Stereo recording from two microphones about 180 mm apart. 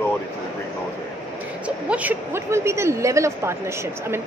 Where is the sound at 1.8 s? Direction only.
10° right (ahead or behind).